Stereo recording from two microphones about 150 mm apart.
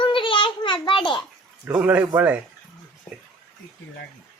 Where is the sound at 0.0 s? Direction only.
35° left (ahead or behind).